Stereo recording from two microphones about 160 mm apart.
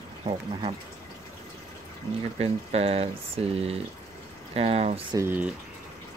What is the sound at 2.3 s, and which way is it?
Speech, 40° right (ahead or behind).